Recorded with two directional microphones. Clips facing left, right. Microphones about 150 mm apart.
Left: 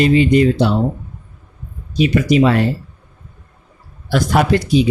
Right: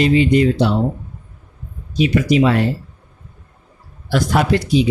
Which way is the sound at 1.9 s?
50° left (ahead or behind).